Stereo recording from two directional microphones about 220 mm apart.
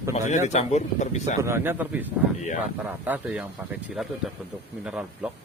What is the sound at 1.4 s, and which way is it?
Speech, 10° right (ahead or behind).